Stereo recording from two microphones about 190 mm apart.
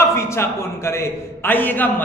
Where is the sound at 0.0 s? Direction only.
15° left (ahead or behind).